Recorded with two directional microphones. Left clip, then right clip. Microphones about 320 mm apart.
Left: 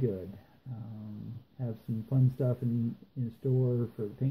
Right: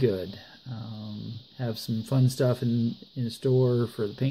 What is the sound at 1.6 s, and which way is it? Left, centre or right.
Speech, right.